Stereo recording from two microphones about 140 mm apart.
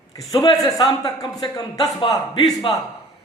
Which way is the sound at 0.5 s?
25° left (ahead or behind).